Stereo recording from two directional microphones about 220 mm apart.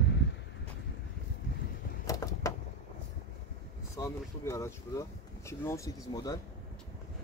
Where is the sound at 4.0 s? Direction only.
15° left (ahead or behind).